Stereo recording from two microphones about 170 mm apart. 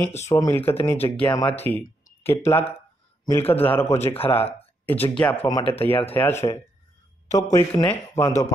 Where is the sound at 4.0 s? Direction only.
35° left (ahead or behind).